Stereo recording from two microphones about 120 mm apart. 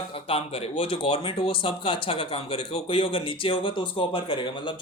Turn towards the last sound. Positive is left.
turn(degrees=40)  # may be behind; listen again after turning